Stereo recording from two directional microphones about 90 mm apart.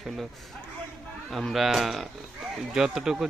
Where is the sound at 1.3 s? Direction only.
Centre (ahead or behind).